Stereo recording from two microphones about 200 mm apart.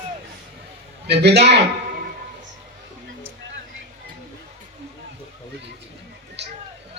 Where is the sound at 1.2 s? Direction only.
55° right (ahead or behind).